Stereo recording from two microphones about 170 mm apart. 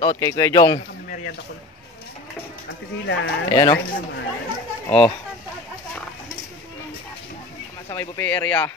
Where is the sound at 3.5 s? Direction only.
25° left (ahead or behind).